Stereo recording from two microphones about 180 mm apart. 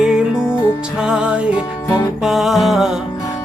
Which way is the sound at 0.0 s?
5° right (ahead or behind).